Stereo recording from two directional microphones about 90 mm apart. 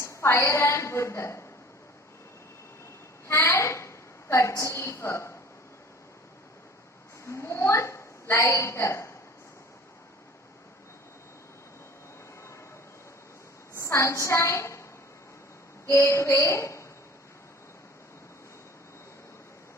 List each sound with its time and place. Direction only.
0.0 s a woman's voice: 30° left (ahead or behind)
3.2 s a woman's voice: 30° left (ahead or behind)
7.3 s a woman's voice: 30° left (ahead or behind)
13.7 s a woman's voice: 30° left (ahead or behind)
15.9 s a woman's voice: 30° left (ahead or behind)